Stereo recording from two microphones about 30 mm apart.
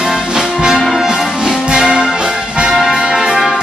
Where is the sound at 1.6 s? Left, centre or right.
Right.